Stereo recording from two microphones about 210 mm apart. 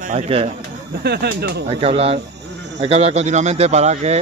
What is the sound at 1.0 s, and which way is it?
Speech, 50° right (ahead or behind).